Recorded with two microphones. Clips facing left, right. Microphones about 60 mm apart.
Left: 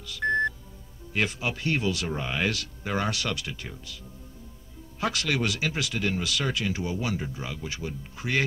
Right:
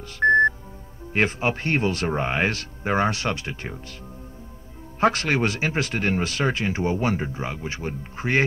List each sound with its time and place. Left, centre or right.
0.0 s music: right
1.1 s speech: right
5.0 s speech: right